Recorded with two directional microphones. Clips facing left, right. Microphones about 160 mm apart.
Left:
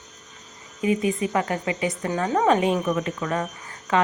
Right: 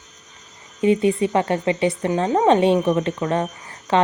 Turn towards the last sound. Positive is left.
turn(degrees=-30)  # may be behind; listen again after turning